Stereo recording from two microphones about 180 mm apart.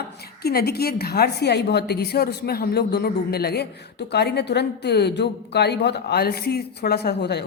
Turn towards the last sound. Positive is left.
turn(degrees=65)  # may be behind; listen again after turning